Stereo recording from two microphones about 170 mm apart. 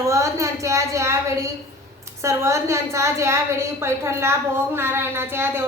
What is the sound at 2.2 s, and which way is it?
A woman's voice, 15° right (ahead or behind).